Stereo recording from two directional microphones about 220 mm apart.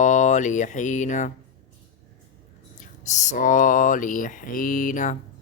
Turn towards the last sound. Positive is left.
turn(degrees=35)  # may be behind; listen again after turning